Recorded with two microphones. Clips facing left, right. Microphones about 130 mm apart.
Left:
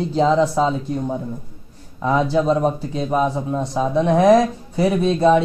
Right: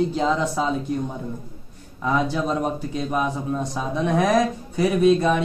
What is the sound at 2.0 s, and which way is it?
Speech, 30° left (ahead or behind).